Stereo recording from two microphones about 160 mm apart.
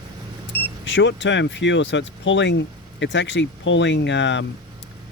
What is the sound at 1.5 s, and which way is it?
Speech, 90° left.